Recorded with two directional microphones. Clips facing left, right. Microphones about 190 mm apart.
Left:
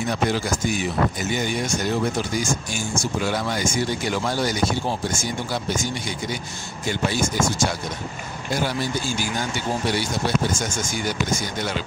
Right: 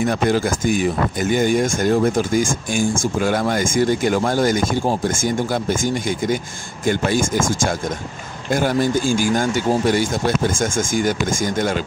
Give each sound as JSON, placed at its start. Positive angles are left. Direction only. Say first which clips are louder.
{"t": 0.1, "sound": "speech", "louder": "right 5 dB", "side_deg": -50}